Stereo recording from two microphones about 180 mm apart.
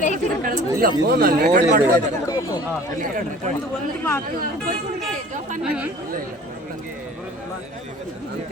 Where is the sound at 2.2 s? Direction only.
20° left (ahead or behind).